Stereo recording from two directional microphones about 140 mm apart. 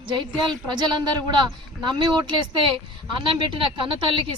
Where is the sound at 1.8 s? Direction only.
30° right (ahead or behind).